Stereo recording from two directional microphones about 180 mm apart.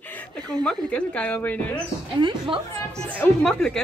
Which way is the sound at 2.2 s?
25° right (ahead or behind).